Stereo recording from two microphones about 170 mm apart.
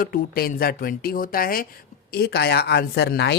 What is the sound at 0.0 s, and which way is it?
A woman's voice, 60° left (ahead or behind).